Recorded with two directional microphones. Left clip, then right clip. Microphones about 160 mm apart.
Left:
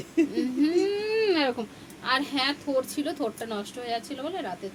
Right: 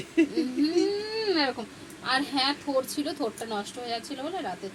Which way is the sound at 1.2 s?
35° left (ahead or behind).